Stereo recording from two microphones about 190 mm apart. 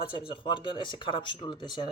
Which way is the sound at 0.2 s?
25° left (ahead or behind).